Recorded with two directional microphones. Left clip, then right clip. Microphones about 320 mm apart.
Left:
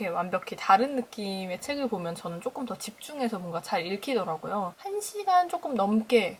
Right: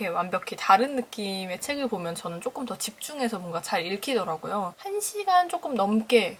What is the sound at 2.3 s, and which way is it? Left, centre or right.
Speech, centre.